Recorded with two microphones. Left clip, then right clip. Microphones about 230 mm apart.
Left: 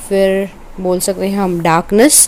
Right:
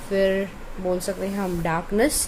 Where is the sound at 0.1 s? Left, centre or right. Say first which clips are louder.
Left 9 dB; left.